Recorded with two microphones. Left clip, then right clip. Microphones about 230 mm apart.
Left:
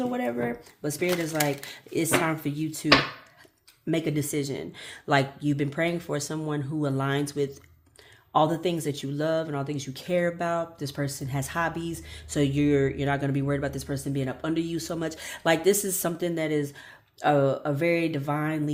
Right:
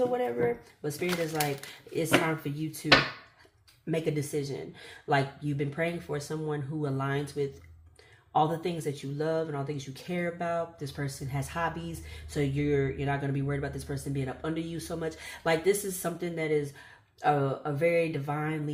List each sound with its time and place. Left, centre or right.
0.1 s speech: left
2.5 s speech: left